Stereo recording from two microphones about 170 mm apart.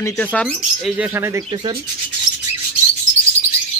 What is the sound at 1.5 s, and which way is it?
Speech, 30° right (ahead or behind).